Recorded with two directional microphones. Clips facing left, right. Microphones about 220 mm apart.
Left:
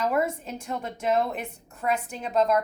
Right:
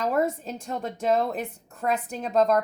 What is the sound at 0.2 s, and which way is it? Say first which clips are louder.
Speech: right 2 dB; 35° right (ahead or behind).